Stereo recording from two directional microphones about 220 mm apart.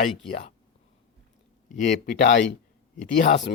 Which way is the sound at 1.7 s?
35° left (ahead or behind).